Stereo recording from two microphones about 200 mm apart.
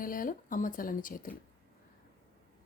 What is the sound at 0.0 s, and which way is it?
Speech, 45° left (ahead or behind).